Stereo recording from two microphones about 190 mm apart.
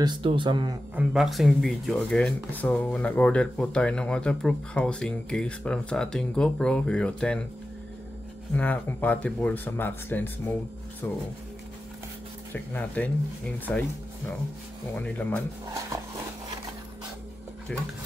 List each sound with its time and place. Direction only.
0.0 s speech: 25° right (ahead or behind)
0.9 s speech: centre (ahead or behind)
8.5 s speech: 10° left (ahead or behind)
12.7 s speech: 5° left (ahead or behind)
15.0 s speech: 10° left (ahead or behind)
17.7 s speech: 5° left (ahead or behind)